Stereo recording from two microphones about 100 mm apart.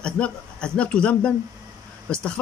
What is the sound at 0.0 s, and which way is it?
Speech, 10° left (ahead or behind).